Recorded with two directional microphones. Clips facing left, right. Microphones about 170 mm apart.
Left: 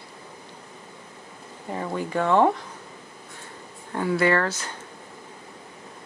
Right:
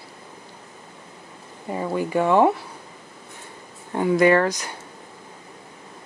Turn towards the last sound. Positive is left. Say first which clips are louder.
# right 5 dB
turn(degrees=-15)  # may be behind; listen again after turning